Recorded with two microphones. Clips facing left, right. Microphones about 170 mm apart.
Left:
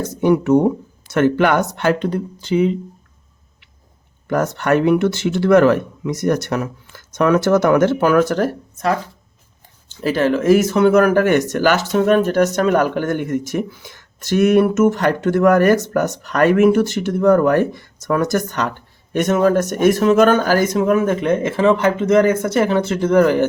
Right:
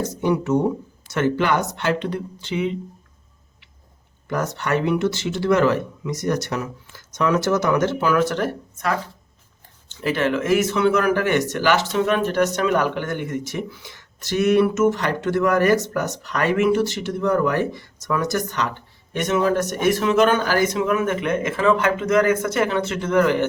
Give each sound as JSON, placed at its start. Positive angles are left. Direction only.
{"t": 0.2, "sound": "speech", "side_deg": 55}
{"t": 4.3, "sound": "speech", "side_deg": 55}
{"t": 10.0, "sound": "speech", "side_deg": 35}